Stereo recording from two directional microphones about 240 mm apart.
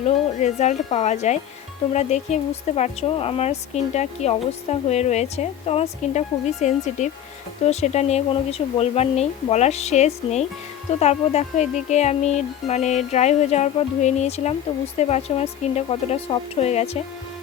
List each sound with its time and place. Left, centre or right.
0.0 s a woman's voice: left